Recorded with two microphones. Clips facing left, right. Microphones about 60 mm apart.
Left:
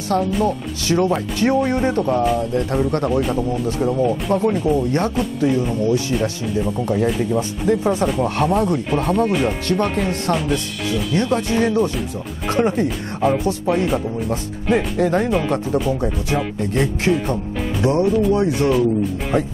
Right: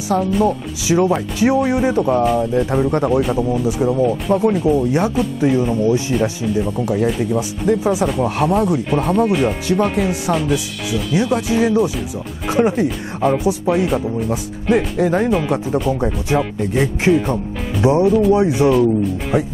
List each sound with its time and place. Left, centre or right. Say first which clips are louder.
0.1 s speech: right 2 dB; centre
6.4 s speech: right 2 dB; centre
16.3 s speech: right 3 dB; centre
18.0 s speech: right 3 dB; centre
18.3 s speech: right 3 dB; centre
19.3 s speech: right 1 dB; centre